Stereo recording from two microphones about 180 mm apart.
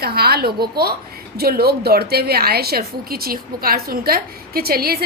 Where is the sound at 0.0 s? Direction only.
60° right (ahead or behind).